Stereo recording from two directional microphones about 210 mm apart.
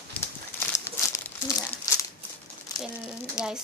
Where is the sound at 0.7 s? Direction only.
15° left (ahead or behind).